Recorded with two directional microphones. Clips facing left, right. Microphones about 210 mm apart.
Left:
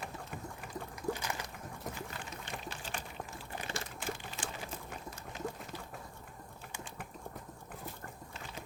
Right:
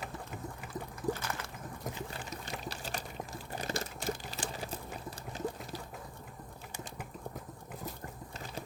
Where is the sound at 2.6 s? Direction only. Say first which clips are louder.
Right 3 dB; 40° right (ahead or behind).